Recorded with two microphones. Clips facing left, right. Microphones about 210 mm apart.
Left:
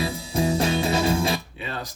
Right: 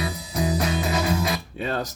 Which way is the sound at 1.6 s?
45° right (ahead or behind).